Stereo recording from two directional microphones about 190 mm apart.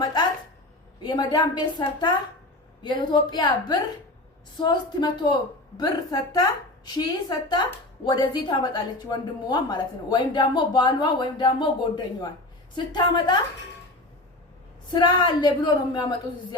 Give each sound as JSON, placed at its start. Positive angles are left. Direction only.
{"t": 0.0, "sound": "a sound", "side_deg": 20}
{"t": 1.0, "sound": "a woman's voice", "side_deg": 20}
{"t": 12.7, "sound": "a woman's voice", "side_deg": 25}
{"t": 14.8, "sound": "a woman's voice", "side_deg": 20}